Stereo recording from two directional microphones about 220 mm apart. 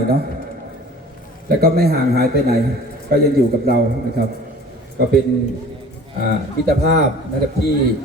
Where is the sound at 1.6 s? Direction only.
45° right (ahead or behind).